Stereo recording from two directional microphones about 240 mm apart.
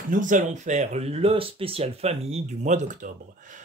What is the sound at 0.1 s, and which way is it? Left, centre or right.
Speech, right.